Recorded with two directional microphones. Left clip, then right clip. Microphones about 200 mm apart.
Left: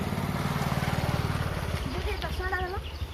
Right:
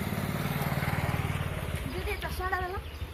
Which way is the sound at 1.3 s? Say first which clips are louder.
Left 3 dB; 35° left (ahead or behind).